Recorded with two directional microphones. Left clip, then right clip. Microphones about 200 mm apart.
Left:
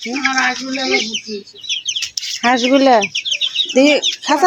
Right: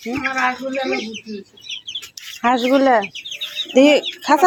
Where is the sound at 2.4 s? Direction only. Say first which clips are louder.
Left 2 dB; 10° left (ahead or behind).